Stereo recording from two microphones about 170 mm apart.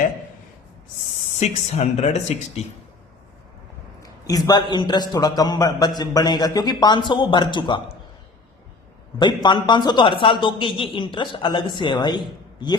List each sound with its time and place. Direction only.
1.4 s speech: 40° left (ahead or behind)
4.0 s a man's voice: 20° left (ahead or behind)
9.1 s a man's voice: 25° left (ahead or behind)